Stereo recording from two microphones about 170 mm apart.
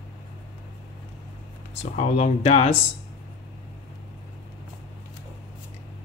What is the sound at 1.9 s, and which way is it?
Speech, 40° left (ahead or behind).